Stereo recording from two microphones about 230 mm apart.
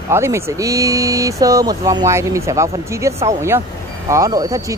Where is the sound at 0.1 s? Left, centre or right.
Centre.